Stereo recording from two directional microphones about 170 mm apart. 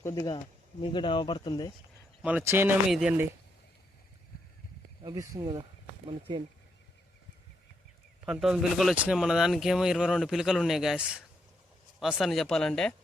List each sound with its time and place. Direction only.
0.0 s speech: 20° left (ahead or behind)
2.2 s speech: 10° right (ahead or behind)
5.0 s speech: 20° right (ahead or behind)
8.2 s speech: 5° right (ahead or behind)